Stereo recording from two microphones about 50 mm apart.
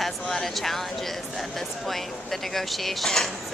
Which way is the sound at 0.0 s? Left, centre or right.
Centre.